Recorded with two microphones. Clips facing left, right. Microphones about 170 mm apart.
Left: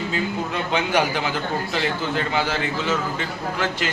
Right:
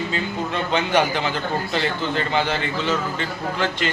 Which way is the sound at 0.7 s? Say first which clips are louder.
Right 1 dB; 10° left (ahead or behind).